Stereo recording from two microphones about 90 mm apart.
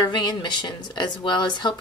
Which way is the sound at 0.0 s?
55° left (ahead or behind).